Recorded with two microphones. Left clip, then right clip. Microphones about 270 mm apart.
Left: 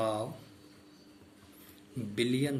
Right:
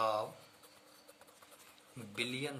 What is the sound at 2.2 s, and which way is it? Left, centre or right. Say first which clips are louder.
Speech: left 7 dB; right.